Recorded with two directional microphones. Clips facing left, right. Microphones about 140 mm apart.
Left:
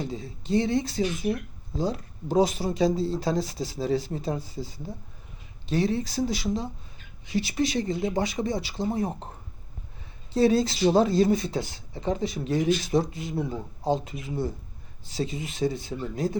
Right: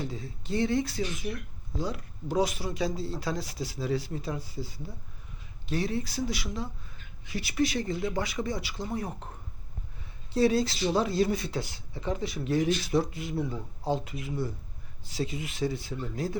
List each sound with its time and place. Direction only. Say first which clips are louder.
0.0 s speech: left 3 dB; 20° left (ahead or behind)
5.6 s speech: left 5 dB; 30° left (ahead or behind)
10.3 s speech: left 3 dB; 25° left (ahead or behind)